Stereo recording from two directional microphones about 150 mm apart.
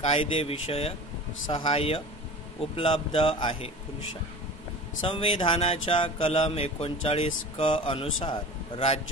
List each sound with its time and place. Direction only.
0.2 s speech: 40° left (ahead or behind)
5.0 s speech: 35° left (ahead or behind)